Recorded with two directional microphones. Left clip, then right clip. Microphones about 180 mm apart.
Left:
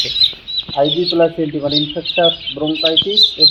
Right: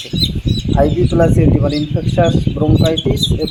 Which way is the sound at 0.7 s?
20° right (ahead or behind).